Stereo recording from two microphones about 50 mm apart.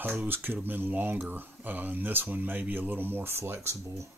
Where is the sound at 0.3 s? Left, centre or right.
Right.